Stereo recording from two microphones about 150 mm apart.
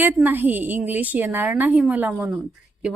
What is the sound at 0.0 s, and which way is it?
Speech, 10° right (ahead or behind).